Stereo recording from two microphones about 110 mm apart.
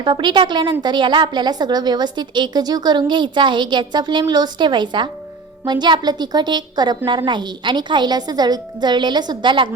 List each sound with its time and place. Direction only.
0.0 s a woman's voice: 45° right (ahead or behind)